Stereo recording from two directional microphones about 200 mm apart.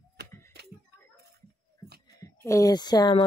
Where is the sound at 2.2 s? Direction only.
15° left (ahead or behind).